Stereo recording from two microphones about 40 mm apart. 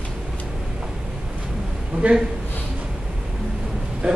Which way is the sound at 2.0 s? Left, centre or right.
Right.